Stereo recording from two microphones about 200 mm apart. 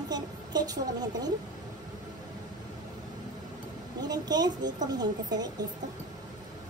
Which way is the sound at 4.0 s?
20° right (ahead or behind).